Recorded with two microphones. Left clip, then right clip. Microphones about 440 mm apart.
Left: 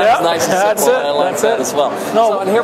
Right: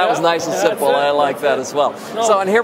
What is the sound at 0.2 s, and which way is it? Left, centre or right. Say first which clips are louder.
Speech: left 2 dB; right.